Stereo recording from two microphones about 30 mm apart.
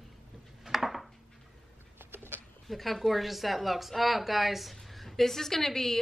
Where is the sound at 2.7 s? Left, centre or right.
Centre.